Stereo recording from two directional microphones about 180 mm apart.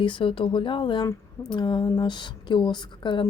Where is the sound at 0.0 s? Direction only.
25° left (ahead or behind).